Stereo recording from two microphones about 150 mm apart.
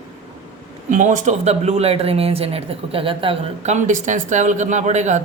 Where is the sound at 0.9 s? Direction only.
55° right (ahead or behind).